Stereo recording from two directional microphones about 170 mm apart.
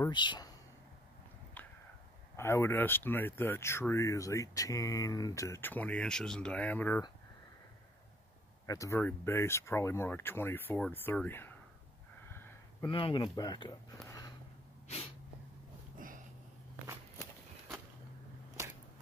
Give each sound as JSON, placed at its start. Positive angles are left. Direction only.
{"t": 0.1, "sound": "speech", "side_deg": 25}
{"t": 2.3, "sound": "speech", "side_deg": 15}
{"t": 8.6, "sound": "speech", "side_deg": 20}
{"t": 12.8, "sound": "speech", "side_deg": 30}
{"t": 14.0, "sound": "a sound", "side_deg": 20}
{"t": 14.9, "sound": "sneeze", "side_deg": 35}